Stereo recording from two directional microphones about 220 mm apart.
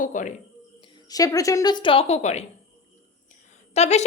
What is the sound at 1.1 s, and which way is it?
A woman's voice, 15° left (ahead or behind).